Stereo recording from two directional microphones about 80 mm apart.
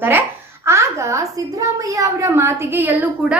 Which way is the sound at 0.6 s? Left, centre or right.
Right.